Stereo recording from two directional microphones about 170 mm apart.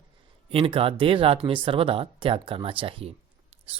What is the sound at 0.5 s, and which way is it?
Speech, 35° right (ahead or behind).